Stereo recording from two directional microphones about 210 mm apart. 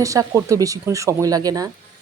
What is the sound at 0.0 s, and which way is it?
Speech, 15° right (ahead or behind).